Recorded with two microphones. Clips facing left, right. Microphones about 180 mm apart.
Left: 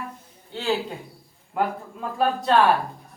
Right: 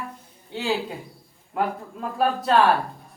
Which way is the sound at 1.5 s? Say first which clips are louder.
Even; centre (ahead or behind).